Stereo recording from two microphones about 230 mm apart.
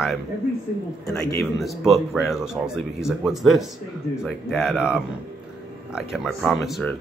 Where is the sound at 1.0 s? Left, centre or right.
Centre.